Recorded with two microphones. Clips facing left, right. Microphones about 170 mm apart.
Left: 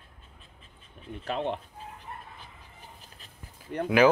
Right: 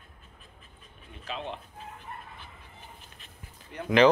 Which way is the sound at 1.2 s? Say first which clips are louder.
Left 6 dB; 55° left (ahead or behind).